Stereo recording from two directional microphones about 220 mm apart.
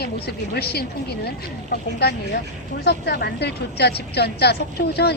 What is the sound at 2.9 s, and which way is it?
Speech, 45° left (ahead or behind).